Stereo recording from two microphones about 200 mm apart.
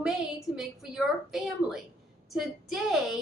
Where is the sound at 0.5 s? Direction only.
Centre (ahead or behind).